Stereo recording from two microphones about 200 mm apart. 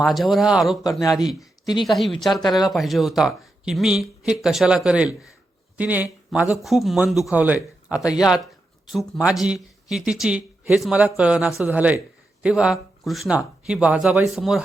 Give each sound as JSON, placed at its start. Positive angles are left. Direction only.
{"t": 0.0, "sound": "speech", "side_deg": 0}
{"t": 1.4, "sound": "speech", "side_deg": 20}
{"t": 1.8, "sound": "speech", "side_deg": 0}
{"t": 2.4, "sound": "speech", "side_deg": 20}
{"t": 2.6, "sound": "speech", "side_deg": 0}